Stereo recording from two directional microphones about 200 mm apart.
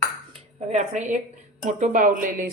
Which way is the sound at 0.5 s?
35° right (ahead or behind).